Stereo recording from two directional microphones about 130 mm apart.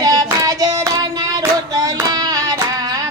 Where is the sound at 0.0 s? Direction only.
25° right (ahead or behind).